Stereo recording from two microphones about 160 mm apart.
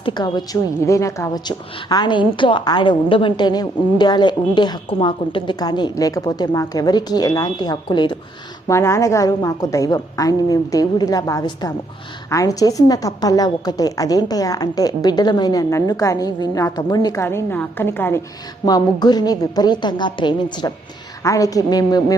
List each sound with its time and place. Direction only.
0.0 s a woman's voice: 30° left (ahead or behind)
8.6 s a woman's voice: 20° left (ahead or behind)
18.6 s a woman's voice: 25° left (ahead or behind)